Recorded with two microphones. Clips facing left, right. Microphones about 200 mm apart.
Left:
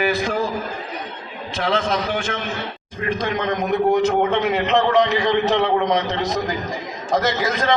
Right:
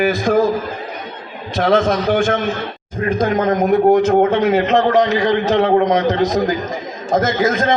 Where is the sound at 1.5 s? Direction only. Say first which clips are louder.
Right 7 dB; 45° right (ahead or behind).